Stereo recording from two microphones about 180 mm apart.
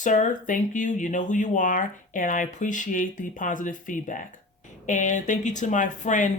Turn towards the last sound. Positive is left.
turn(degrees=45)  # may be behind; listen again after turning